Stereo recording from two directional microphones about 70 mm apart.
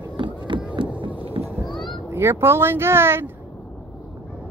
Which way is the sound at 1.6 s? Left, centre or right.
Centre.